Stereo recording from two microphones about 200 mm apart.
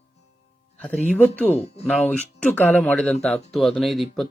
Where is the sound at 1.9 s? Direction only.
5° left (ahead or behind).